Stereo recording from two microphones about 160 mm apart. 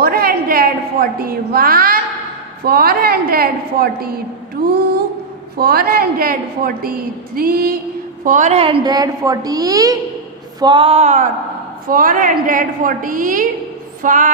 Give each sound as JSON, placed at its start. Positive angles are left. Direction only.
{"t": 0.0, "sound": "a sound", "side_deg": -70}
{"t": 1.0, "sound": "a woman's voice", "side_deg": -70}
{"t": 5.6, "sound": "a woman's voice", "side_deg": -70}
{"t": 8.2, "sound": "a woman's voice", "side_deg": -50}
{"t": 11.9, "sound": "a woman's voice", "side_deg": -60}